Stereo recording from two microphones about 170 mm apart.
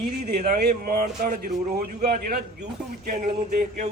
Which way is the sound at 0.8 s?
60° right (ahead or behind).